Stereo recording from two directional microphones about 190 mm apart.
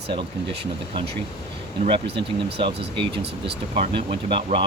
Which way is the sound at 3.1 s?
60° right (ahead or behind).